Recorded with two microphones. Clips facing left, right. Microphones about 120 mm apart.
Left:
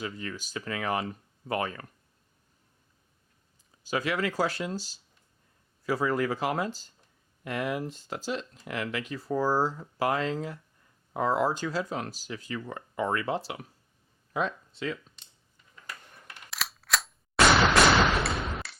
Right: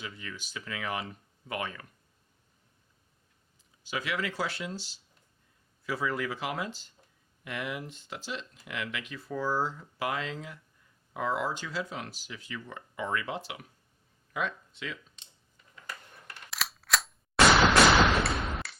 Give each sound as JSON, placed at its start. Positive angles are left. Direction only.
{"t": 0.0, "sound": "speech", "side_deg": 40}
{"t": 3.8, "sound": "speech", "side_deg": 40}
{"t": 16.5, "sound": "gunshot", "side_deg": 0}